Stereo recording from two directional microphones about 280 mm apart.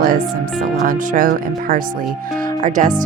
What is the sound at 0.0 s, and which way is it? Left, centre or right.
Speech, right.